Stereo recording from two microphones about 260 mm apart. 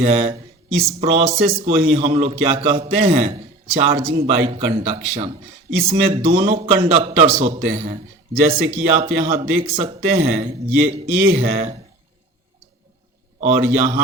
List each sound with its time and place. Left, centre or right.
0.0 s a man's voice: right
13.4 s a man's voice: right